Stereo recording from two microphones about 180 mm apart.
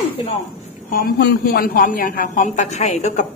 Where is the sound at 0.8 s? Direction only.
55° left (ahead or behind).